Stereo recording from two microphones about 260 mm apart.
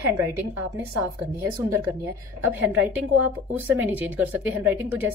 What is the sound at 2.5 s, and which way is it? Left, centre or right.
A woman's voice, centre.